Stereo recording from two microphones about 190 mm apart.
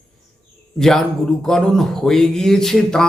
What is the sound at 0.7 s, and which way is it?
A man's voice, centre (ahead or behind).